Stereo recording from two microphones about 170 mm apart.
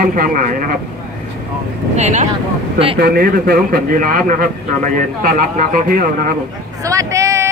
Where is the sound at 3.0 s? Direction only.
60° right (ahead or behind).